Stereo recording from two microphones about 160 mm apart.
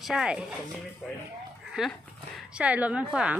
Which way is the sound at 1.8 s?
5° right (ahead or behind).